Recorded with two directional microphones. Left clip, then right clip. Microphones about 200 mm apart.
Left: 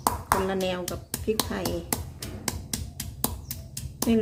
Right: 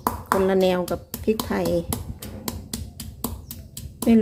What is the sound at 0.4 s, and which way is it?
Speech, 30° right (ahead or behind).